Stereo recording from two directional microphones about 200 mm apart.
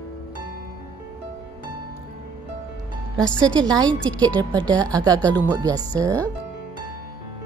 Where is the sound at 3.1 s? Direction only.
5° left (ahead or behind).